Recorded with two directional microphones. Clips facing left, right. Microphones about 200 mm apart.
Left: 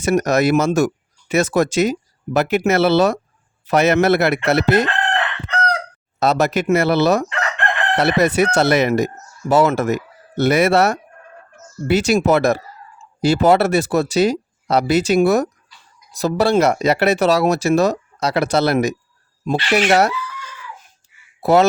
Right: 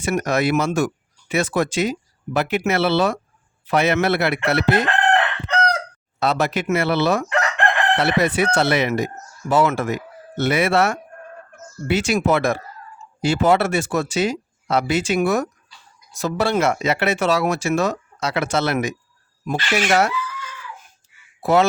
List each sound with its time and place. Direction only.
0.0 s speech: 40° left (ahead or behind)
6.1 s speech: 40° left (ahead or behind)
21.4 s speech: 40° left (ahead or behind)